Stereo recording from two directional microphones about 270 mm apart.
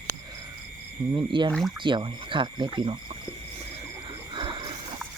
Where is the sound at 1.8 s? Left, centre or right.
Centre.